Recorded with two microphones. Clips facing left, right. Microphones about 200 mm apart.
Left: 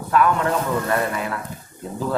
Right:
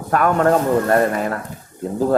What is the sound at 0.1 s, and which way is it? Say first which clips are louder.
A man's voice: right 4 dB; 50° right (ahead or behind).